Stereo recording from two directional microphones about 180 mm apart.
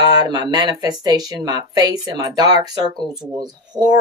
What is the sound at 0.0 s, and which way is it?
Speech, 20° right (ahead or behind).